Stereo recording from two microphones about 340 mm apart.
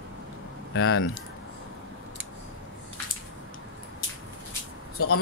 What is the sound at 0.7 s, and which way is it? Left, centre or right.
Speech, left.